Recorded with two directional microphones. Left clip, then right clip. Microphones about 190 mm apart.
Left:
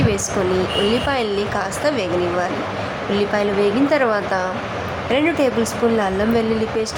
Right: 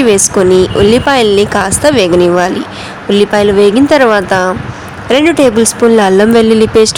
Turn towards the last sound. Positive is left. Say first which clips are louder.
# right 14 dB
turn(degrees=-45)  # may be behind; listen again after turning